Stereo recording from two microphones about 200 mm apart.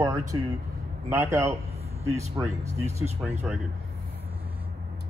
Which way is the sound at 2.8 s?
35° right (ahead or behind).